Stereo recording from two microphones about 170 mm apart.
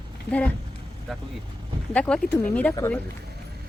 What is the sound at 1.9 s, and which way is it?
Speech, 5° left (ahead or behind).